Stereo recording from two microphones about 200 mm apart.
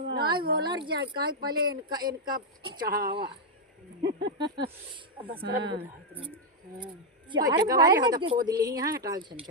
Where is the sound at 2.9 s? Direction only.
50° right (ahead or behind).